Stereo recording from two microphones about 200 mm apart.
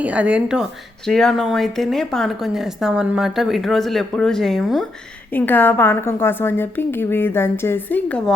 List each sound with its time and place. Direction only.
0.0 s a woman's voice: 5° right (ahead or behind)